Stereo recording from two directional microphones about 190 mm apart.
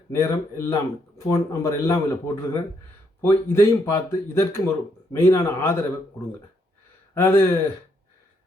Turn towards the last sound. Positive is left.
turn(degrees=10)  # may be behind; listen again after turning